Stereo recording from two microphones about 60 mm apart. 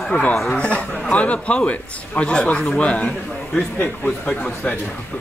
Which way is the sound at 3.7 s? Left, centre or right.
Left.